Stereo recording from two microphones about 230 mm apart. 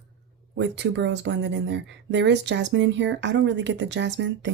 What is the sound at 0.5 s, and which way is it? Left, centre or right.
A woman's voice, right.